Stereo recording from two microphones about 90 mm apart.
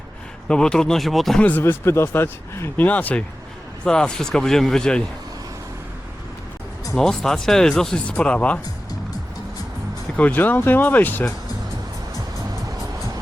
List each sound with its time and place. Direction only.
0.4 s speech: 10° left (ahead or behind)
1.4 s speech: 15° left (ahead or behind)
1.6 s speech: 30° left (ahead or behind); by 5.0 s 10° left (ahead or behind)
6.9 s speech: 5° left (ahead or behind)
10.2 s speech: 20° left (ahead or behind)